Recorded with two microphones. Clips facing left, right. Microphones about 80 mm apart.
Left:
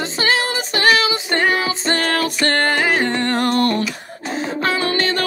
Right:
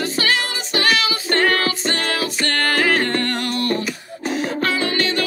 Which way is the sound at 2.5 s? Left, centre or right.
Left.